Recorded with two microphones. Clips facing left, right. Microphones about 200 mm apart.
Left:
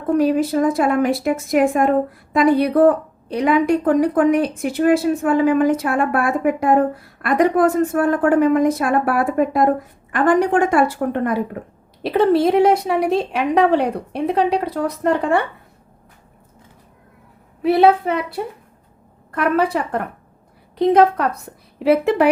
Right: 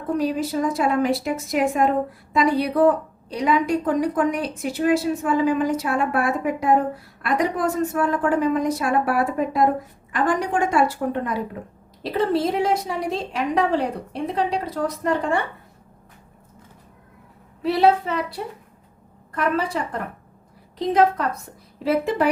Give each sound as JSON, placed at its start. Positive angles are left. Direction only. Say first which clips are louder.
{"t": 0.2, "sound": "a woman's voice", "louder": "left 6 dB", "side_deg": 55}
{"t": 17.6, "sound": "a woman's voice", "louder": "left 4 dB", "side_deg": 55}